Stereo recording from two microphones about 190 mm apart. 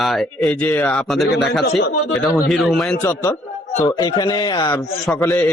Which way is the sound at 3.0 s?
15° left (ahead or behind).